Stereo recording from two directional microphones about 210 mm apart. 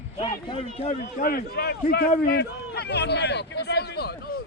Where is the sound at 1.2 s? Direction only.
45° left (ahead or behind).